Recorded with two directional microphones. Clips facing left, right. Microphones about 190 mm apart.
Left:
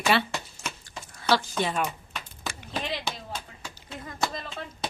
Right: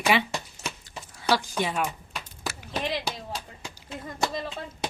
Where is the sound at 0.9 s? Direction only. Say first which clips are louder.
Left 1 dB; 10° right (ahead or behind).